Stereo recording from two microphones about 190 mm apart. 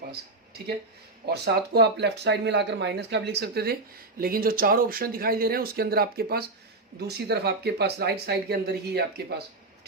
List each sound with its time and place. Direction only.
1.3 s speech: 60° right (ahead or behind)